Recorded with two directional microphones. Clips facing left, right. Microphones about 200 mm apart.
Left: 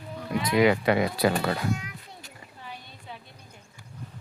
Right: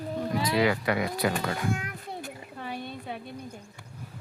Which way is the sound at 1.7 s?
55° right (ahead or behind).